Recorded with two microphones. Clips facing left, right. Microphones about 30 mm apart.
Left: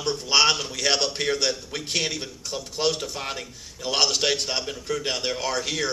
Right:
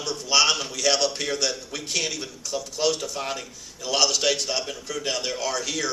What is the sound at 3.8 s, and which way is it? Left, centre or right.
A man's voice, left.